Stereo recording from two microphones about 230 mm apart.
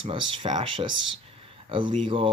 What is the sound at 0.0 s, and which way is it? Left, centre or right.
Speech, right.